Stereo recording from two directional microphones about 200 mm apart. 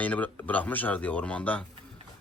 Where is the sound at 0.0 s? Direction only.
5° left (ahead or behind).